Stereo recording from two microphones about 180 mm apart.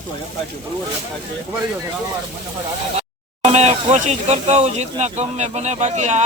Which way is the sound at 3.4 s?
35° right (ahead or behind).